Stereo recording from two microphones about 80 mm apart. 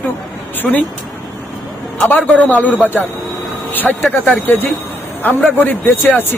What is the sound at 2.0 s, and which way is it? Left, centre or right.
A man's voice, left.